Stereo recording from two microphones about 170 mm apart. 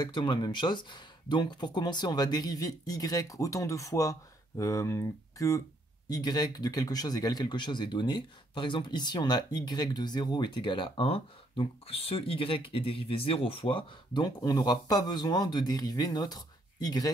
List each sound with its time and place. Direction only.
0.0 s speech: 25° left (ahead or behind)